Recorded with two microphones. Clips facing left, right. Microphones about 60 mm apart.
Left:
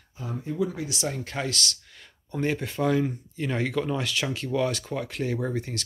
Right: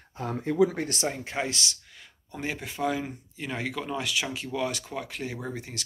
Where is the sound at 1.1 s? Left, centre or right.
Centre.